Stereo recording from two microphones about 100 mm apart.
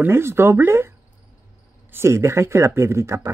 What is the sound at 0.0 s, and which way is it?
Speech, 25° right (ahead or behind).